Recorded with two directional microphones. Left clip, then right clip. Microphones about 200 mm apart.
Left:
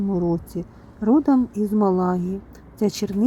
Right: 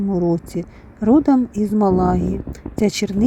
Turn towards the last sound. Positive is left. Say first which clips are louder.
# right 4 dB
turn(degrees=-20)  # may be behind; listen again after turning